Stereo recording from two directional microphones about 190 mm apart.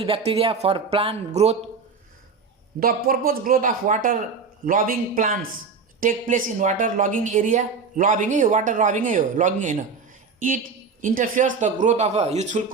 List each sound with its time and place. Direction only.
0.0 s speech: 30° right (ahead or behind)
2.8 s a woman's voice: 50° right (ahead or behind)
11.0 s speech: 45° right (ahead or behind)